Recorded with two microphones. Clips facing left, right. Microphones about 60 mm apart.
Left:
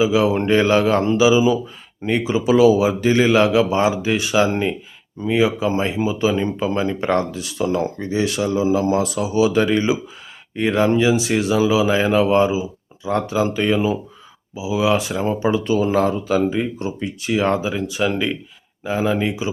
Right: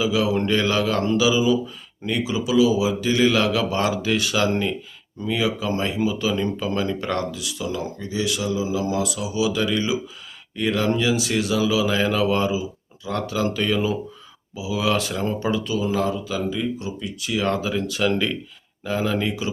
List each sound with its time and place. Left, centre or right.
0.0 s speech: left
2.6 s speech: left; by 15.6 s centre
15.6 s speech: left; by 19.5 s centre